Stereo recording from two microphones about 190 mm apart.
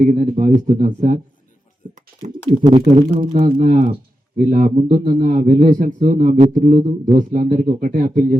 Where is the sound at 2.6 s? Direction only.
30° right (ahead or behind).